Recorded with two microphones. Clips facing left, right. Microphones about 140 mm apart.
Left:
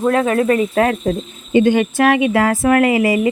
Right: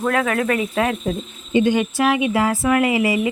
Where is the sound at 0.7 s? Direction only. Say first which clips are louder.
Left 5 dB; 50° left (ahead or behind).